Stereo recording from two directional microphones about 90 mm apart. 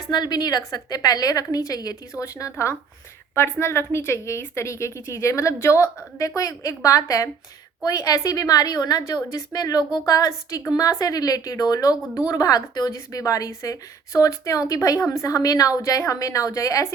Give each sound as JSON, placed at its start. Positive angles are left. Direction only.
{"t": 0.1, "sound": "a woman's voice", "side_deg": 50}